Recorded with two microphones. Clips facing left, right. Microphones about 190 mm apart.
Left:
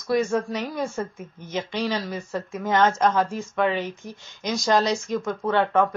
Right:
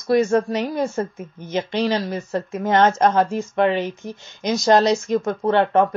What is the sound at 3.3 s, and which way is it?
Speech, 65° right (ahead or behind).